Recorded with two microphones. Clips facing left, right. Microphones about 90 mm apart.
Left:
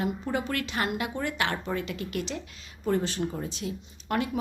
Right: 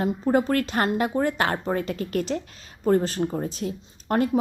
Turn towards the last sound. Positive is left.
turn(degrees=-40)  # may be behind; listen again after turning